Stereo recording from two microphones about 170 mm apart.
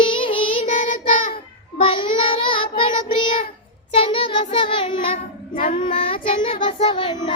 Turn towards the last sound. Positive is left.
turn(degrees=30)  # may be behind; listen again after turning